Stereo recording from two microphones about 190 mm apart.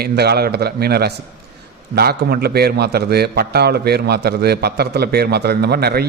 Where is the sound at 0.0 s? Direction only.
55° right (ahead or behind).